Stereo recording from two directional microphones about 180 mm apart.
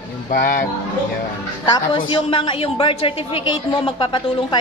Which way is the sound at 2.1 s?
25° left (ahead or behind).